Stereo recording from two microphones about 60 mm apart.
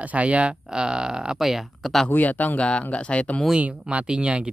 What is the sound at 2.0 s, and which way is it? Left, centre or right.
Speech, left.